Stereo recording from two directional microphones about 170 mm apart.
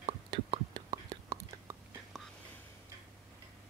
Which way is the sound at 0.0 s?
30° right (ahead or behind).